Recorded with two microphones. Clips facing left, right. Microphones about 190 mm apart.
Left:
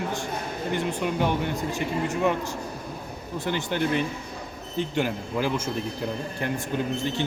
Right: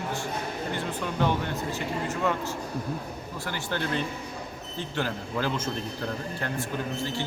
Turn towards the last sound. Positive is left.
turn(degrees=20)  # may be behind; listen again after turning